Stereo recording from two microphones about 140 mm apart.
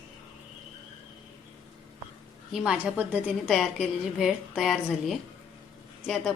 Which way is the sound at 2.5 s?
5° right (ahead or behind).